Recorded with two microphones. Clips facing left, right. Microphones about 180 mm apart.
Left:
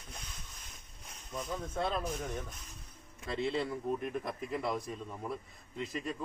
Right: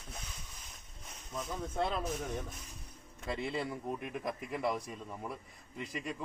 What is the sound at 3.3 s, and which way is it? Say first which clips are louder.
A man's voice: left 3 dB; 15° right (ahead or behind).